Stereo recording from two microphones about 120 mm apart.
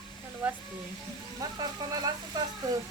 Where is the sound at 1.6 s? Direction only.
30° right (ahead or behind).